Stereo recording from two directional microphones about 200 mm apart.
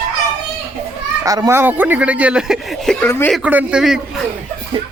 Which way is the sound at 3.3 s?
5° right (ahead or behind).